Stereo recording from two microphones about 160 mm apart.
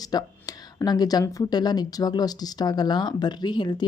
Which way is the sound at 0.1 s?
25° left (ahead or behind).